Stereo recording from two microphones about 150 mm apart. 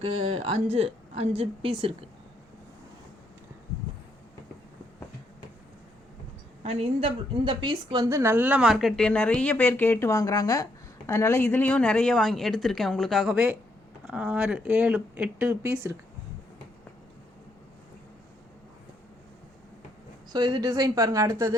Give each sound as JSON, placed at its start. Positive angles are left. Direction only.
{"t": 0.0, "sound": "a woman's voice", "side_deg": -40}
{"t": 6.6, "sound": "a woman's voice", "side_deg": -45}
{"t": 20.3, "sound": "a woman's voice", "side_deg": -25}